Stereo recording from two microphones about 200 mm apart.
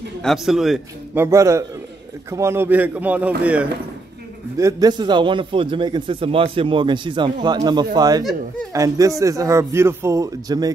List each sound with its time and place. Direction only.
0.2 s a man's voice: centre (ahead or behind)
1.2 s a man's voice: 15° right (ahead or behind)